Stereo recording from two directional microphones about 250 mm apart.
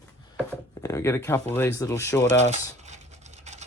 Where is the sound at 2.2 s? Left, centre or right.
Right.